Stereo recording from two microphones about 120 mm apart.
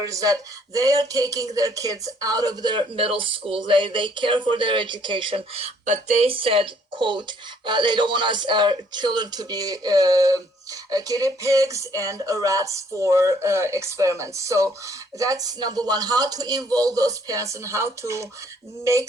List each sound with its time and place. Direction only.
0.0 s speech: 30° right (ahead or behind)